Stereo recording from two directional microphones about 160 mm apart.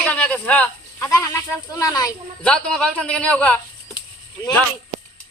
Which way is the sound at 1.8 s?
25° left (ahead or behind).